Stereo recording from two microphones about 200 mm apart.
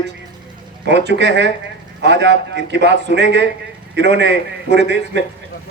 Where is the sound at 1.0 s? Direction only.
60° right (ahead or behind).